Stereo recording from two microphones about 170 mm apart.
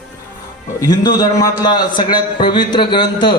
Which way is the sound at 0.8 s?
20° left (ahead or behind).